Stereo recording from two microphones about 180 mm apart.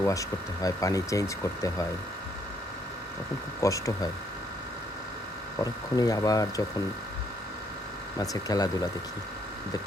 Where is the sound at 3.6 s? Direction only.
20° left (ahead or behind).